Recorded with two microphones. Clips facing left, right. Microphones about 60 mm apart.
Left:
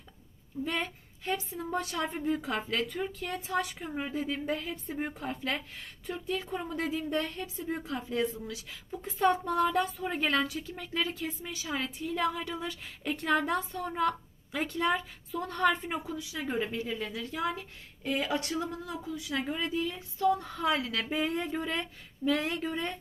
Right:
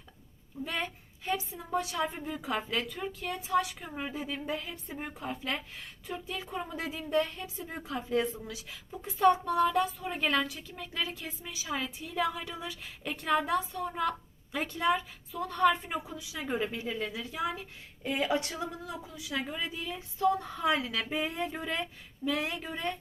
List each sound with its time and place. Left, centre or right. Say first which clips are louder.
0.6 s a woman's voice: left 2 dB; centre
8.2 s speech: left 2 dB; right
8.9 s speech: right 2 dB; centre
16.0 s a woman's voice: left 1 dB; centre
18.0 s speech: right 1 dB; right
19.6 s speech: left 5 dB; centre
20.1 s speech: even; right
21.0 s speech: left 2 dB; centre